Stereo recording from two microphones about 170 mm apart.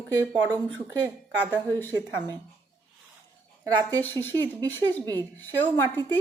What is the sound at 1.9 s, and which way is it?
Speech, 25° right (ahead or behind).